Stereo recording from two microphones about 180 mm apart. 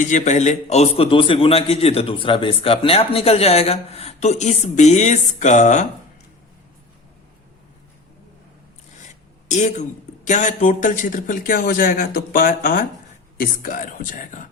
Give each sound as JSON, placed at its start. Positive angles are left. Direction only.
{"t": 0.0, "sound": "a man's voice", "side_deg": 40}
{"t": 9.5, "sound": "a man's voice", "side_deg": 40}